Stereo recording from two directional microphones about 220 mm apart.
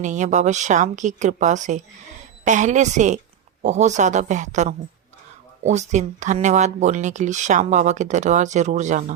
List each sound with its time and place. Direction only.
0.0 s speech: 35° right (ahead or behind)